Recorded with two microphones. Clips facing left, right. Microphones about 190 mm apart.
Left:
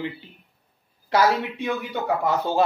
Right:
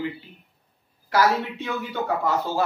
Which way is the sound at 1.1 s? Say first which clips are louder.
Left 1 dB; 20° left (ahead or behind).